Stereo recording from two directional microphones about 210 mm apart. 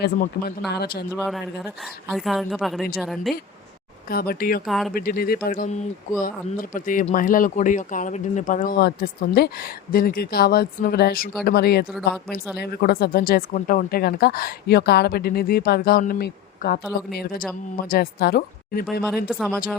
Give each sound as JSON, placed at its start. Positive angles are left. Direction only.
{"t": 0.0, "sound": "speech", "side_deg": 45}
{"t": 1.1, "sound": "a woman's voice", "side_deg": 0}
{"t": 4.1, "sound": "speech", "side_deg": 45}
{"t": 4.6, "sound": "a woman's voice", "side_deg": 0}
{"t": 4.9, "sound": "speech", "side_deg": 45}
{"t": 8.8, "sound": "speech", "side_deg": 50}
{"t": 19.3, "sound": "a woman's voice", "side_deg": -5}